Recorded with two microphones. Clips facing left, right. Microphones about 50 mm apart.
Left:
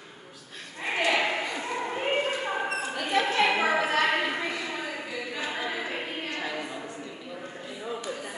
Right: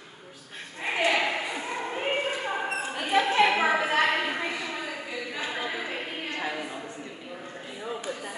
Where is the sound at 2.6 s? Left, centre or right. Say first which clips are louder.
Even; centre.